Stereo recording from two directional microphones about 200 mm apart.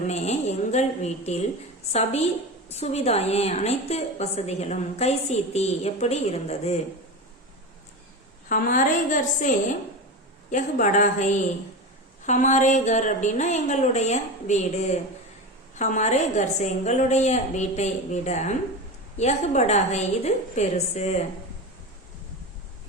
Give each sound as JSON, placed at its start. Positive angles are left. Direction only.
{"t": 0.1, "sound": "a woman's voice", "side_deg": 35}
{"t": 8.4, "sound": "a woman's voice", "side_deg": 40}